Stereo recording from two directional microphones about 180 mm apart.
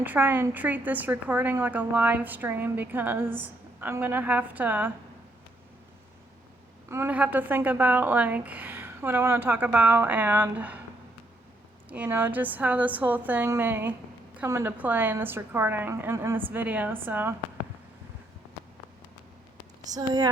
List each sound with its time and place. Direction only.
0.0 s a woman's voice: 10° right (ahead or behind)
6.8 s a woman's voice: 15° right (ahead or behind)
11.9 s a woman's voice: 10° right (ahead or behind)
19.9 s speech: 20° right (ahead or behind)